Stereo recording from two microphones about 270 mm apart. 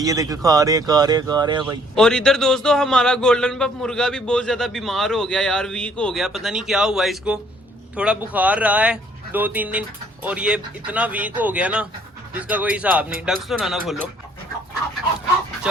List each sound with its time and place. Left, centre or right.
0.0 s speech: centre
2.0 s a man's voice: centre